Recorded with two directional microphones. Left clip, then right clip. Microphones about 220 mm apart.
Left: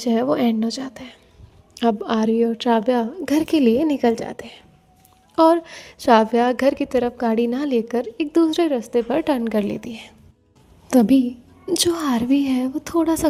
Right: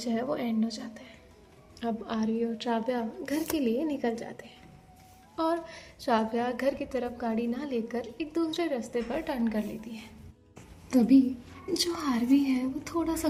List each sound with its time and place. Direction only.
0.0 s a woman's voice: 45° left (ahead or behind)